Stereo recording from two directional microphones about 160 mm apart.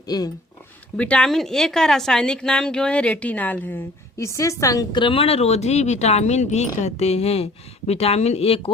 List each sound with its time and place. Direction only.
0.1 s a woman's voice: 25° left (ahead or behind)
0.9 s a woman's voice: 5° left (ahead or behind); by 8.7 s 35° left (ahead or behind)